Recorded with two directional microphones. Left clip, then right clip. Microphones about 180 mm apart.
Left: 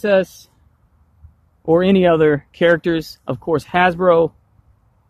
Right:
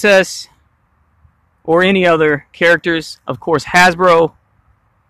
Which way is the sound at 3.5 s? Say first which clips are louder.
Right 6 dB; 5° right (ahead or behind).